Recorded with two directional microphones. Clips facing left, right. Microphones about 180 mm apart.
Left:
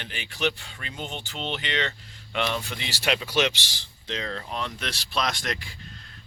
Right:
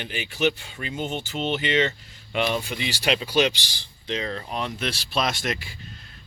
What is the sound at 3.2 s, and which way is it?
Speech, 30° right (ahead or behind).